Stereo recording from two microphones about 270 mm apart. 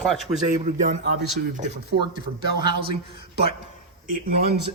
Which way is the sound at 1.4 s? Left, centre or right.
Right.